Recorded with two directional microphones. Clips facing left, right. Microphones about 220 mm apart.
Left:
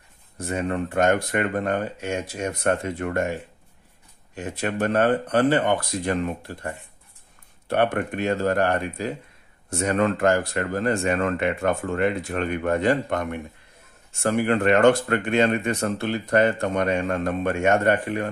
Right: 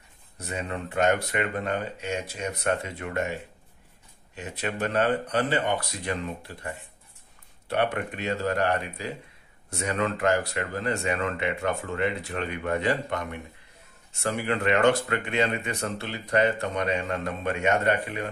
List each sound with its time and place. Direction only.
0.4 s speech: 50° left (ahead or behind)
4.4 s speech: 50° left (ahead or behind)